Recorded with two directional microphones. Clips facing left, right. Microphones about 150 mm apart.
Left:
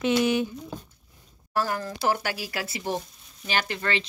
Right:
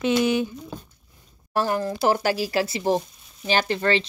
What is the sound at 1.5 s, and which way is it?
A woman's voice, 25° right (ahead or behind).